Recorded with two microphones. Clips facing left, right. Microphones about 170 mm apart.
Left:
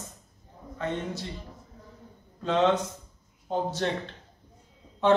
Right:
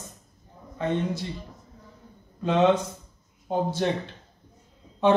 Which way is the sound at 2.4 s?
10° right (ahead or behind).